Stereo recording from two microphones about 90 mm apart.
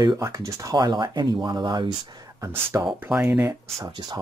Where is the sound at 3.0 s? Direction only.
20° right (ahead or behind).